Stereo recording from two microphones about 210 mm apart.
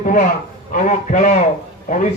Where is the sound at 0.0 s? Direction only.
40° left (ahead or behind).